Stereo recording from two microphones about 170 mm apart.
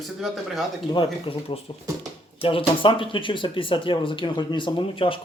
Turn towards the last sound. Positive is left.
turn(degrees=30)  # may be behind; listen again after turning